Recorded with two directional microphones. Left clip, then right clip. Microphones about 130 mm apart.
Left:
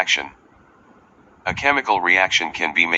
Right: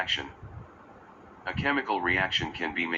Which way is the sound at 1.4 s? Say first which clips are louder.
Left 10 dB; 35° left (ahead or behind).